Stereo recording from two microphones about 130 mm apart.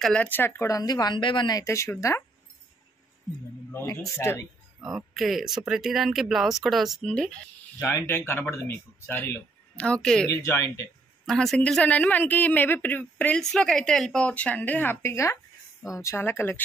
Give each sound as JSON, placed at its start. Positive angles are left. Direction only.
{"t": 0.0, "sound": "speech", "side_deg": 10}
{"t": 1.6, "sound": "speech", "side_deg": 20}
{"t": 3.8, "sound": "speech", "side_deg": 25}
{"t": 4.8, "sound": "speech", "side_deg": 0}
{"t": 8.1, "sound": "speech", "side_deg": 15}
{"t": 10.3, "sound": "speech", "side_deg": 20}
{"t": 11.2, "sound": "speech", "side_deg": 5}